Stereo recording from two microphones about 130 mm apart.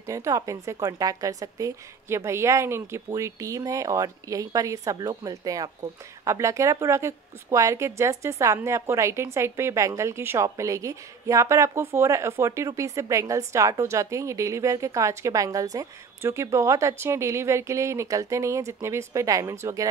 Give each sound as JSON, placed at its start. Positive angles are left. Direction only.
{"t": 0.0, "sound": "a woman's voice", "side_deg": -25}